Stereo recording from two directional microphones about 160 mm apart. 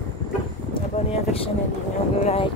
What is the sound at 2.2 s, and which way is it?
Speech, 40° left (ahead or behind).